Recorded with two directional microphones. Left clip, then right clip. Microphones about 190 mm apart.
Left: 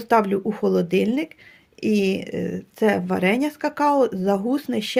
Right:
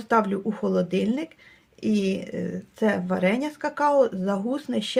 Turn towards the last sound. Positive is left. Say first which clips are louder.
# left 4 dB
turn(degrees=40)  # may be behind; listen again after turning